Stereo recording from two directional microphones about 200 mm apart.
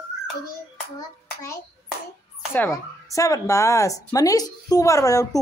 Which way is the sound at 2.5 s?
10° left (ahead or behind).